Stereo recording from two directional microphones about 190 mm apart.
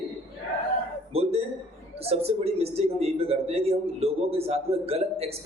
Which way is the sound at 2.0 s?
30° right (ahead or behind).